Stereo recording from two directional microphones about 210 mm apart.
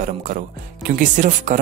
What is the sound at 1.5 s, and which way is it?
Speech, 35° right (ahead or behind).